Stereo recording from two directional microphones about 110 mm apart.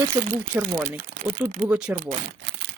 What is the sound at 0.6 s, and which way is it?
Speech, 15° right (ahead or behind).